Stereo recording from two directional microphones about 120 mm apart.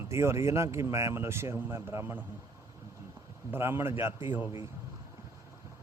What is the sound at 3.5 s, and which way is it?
Speech, 20° right (ahead or behind).